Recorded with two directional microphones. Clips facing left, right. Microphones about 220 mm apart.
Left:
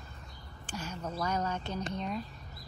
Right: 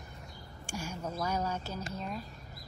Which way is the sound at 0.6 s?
10° right (ahead or behind).